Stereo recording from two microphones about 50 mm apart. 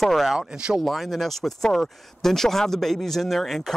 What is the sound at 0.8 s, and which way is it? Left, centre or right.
Speech, centre.